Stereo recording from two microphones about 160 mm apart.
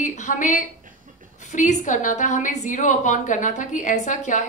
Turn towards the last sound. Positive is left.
turn(degrees=50)  # may be behind; listen again after turning